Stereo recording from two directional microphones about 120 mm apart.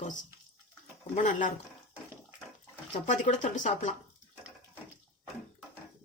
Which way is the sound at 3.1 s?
85° left.